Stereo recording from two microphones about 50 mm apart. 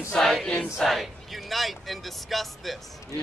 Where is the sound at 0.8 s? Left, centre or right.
Centre.